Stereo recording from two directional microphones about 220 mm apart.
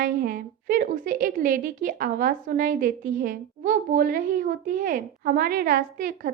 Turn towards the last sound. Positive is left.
turn(degrees=-40)  # may be behind; listen again after turning